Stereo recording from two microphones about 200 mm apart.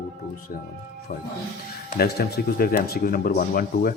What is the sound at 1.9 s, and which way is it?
Speech, 50° left (ahead or behind).